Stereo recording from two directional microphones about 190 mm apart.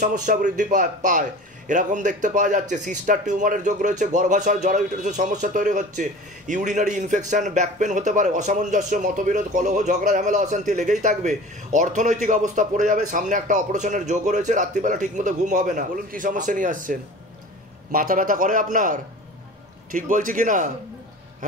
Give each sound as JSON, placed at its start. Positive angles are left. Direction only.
{"t": 0.0, "sound": "a man's voice", "side_deg": -45}